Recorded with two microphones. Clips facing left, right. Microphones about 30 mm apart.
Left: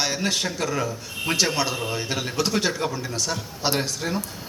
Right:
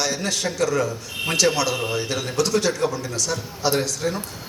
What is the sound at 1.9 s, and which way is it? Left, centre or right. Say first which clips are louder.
Speech: right 2 dB; centre.